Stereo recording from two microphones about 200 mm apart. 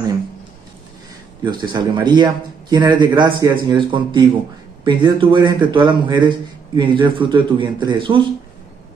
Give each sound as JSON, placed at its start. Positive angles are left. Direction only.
{"t": 1.4, "sound": "a man's voice", "side_deg": -20}